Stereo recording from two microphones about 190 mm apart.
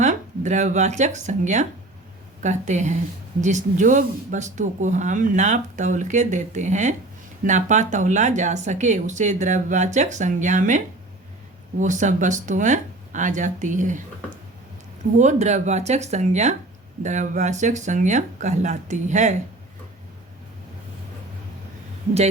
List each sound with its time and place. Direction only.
0.0 s speech: 40° right (ahead or behind)
15.2 s speech: 40° right (ahead or behind)